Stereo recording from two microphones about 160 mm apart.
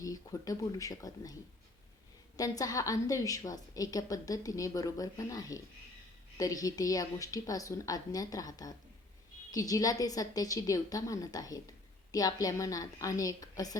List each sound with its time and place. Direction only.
0.0 s a woman's voice: 20° left (ahead or behind)